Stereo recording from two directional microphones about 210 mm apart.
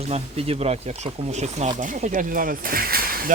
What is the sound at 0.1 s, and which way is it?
Speech, 30° right (ahead or behind).